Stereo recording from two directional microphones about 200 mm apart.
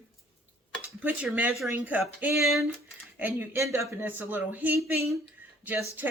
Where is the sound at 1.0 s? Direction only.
5° right (ahead or behind).